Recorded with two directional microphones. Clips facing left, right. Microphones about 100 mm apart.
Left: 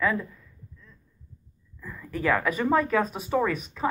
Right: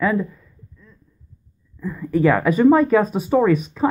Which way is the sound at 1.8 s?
25° right (ahead or behind).